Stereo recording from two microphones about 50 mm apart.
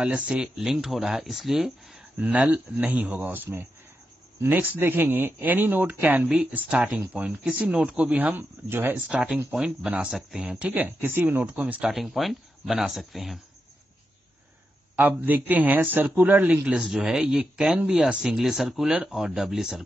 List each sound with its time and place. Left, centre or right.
0.0 s speech: centre
2.1 s speech: right
6.2 s speech: right
8.6 s speech: right
9.1 s speech: right
10.7 s speech: right
11.4 s speech: right
11.9 s speech: centre
15.0 s speech: right
16.8 s speech: centre